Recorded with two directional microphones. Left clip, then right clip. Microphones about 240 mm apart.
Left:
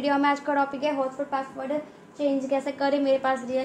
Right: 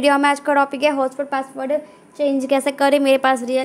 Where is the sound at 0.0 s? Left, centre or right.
Right.